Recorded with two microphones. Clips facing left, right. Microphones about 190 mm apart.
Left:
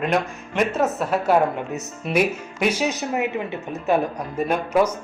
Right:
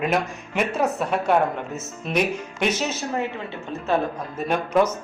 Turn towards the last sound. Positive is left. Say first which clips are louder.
# left 1 dB
turn(degrees=5)  # may be behind; listen again after turning